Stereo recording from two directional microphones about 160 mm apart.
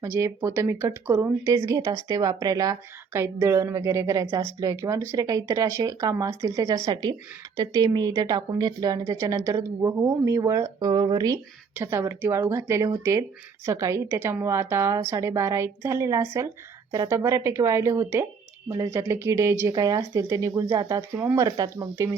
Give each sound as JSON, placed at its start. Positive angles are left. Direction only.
{"t": 0.0, "sound": "a woman's voice", "side_deg": -15}